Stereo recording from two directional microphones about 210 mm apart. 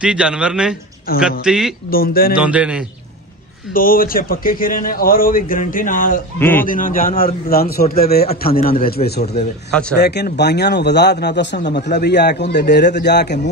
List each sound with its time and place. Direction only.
0.0 s speech: 5° right (ahead or behind)
1.9 s a man's voice: 45° left (ahead or behind)
2.3 s speech: 5° right (ahead or behind)
3.7 s a man's voice: 40° left (ahead or behind)